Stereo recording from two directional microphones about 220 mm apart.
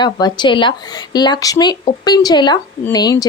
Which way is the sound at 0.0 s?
20° left (ahead or behind).